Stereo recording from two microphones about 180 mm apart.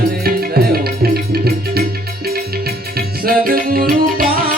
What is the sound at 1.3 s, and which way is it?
Music, 60° right (ahead or behind).